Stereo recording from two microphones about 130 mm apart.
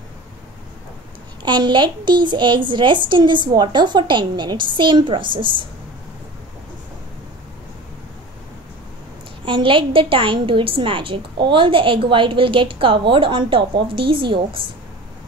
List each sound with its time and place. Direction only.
1.4 s a woman's voice: 35° right (ahead or behind)
9.4 s a woman's voice: 40° right (ahead or behind)